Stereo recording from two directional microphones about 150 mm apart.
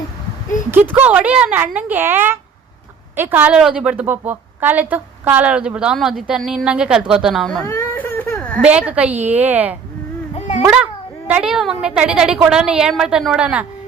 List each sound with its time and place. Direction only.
0.7 s a woman's voice: 10° right (ahead or behind)
7.6 s baby cry: 15° left (ahead or behind)
8.6 s a woman's voice: 10° right (ahead or behind)
10.3 s a sound: 50° left (ahead or behind)
11.3 s a woman's voice: 10° right (ahead or behind)